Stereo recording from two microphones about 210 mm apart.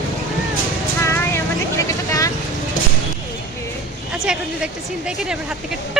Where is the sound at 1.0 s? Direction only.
10° left (ahead or behind).